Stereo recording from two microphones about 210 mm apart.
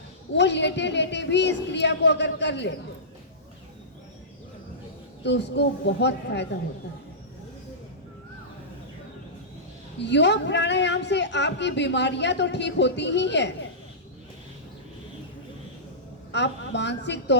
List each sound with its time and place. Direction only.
0.3 s a man's voice: 55° left (ahead or behind)
5.2 s a man's voice: 55° left (ahead or behind)
10.0 s a man's voice: 55° left (ahead or behind)
16.3 s a woman's voice: 55° left (ahead or behind)